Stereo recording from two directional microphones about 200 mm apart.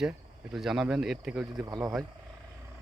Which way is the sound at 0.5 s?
Centre (ahead or behind).